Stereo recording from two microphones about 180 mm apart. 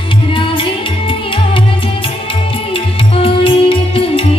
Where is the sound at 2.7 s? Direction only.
30° left (ahead or behind).